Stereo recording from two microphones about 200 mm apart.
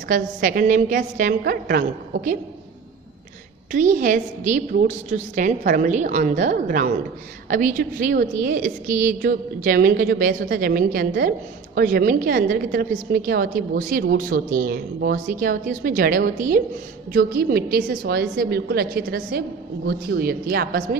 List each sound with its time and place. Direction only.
0.1 s a woman's voice: 45° right (ahead or behind)
3.7 s a woman's voice: 40° right (ahead or behind)